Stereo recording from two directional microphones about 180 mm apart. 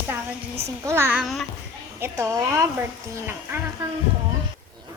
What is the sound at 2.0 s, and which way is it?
Speech, 15° right (ahead or behind).